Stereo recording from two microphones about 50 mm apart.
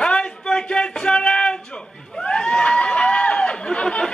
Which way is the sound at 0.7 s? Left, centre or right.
Centre.